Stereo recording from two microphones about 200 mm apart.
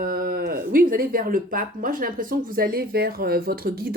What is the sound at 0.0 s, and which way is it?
Speech, 45° right (ahead or behind).